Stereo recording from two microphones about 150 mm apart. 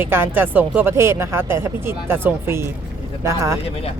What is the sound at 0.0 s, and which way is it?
Speech, 15° right (ahead or behind).